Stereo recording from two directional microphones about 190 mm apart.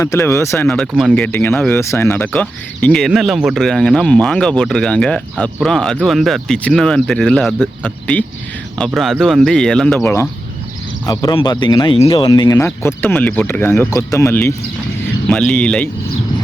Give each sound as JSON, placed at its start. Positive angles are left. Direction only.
{"t": 0.0, "sound": "speech", "side_deg": 15}
{"t": 0.7, "sound": "speech", "side_deg": 0}